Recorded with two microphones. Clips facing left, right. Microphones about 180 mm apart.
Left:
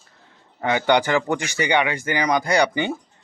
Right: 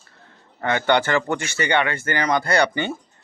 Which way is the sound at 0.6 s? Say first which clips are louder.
Left 1 dB; 10° left (ahead or behind).